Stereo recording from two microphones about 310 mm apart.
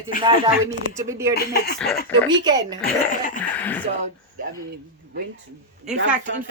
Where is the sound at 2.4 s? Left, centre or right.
Centre.